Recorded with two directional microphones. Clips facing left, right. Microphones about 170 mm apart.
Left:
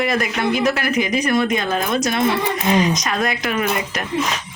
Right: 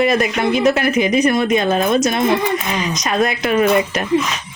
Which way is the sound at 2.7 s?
20° left (ahead or behind).